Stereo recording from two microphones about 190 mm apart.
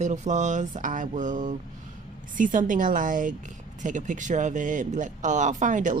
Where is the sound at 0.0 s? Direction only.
40° right (ahead or behind).